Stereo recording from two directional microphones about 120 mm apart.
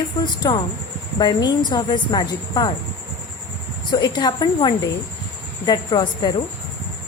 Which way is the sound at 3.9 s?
35° left (ahead or behind).